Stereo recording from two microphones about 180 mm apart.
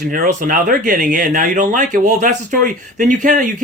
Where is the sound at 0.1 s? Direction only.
50° right (ahead or behind).